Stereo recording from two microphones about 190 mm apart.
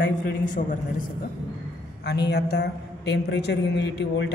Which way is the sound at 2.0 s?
60° left (ahead or behind).